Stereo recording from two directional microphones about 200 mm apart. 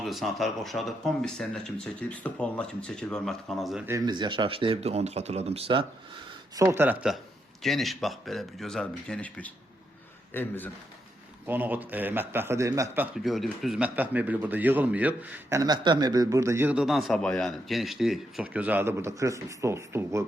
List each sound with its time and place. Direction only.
0.0 s speech: centre (ahead or behind)
3.8 s speech: 20° right (ahead or behind)
6.6 s a man's voice: 15° right (ahead or behind); by 10.7 s 10° left (ahead or behind)
11.4 s a man's voice: 10° right (ahead or behind)
13.2 s a man's voice: centre (ahead or behind)